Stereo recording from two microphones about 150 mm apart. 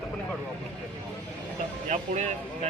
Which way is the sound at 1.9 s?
50° right (ahead or behind).